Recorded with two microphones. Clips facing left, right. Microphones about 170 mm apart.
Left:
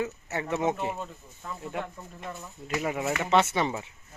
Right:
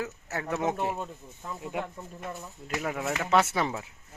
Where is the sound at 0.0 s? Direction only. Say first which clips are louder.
Left 3 dB; centre (ahead or behind).